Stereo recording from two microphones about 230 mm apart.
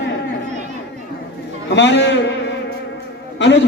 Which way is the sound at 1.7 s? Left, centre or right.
Left.